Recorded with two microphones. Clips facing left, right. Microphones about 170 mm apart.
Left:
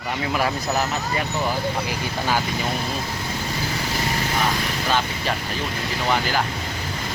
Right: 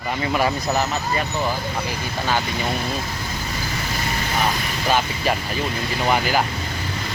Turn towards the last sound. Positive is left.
turn(degrees=-10)  # may be behind; listen again after turning